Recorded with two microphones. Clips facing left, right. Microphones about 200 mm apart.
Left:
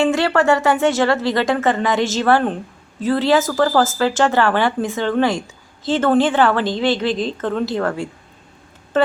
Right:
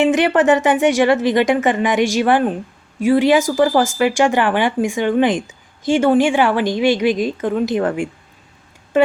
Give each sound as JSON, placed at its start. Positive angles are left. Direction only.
{"t": 0.0, "sound": "speech", "side_deg": -20}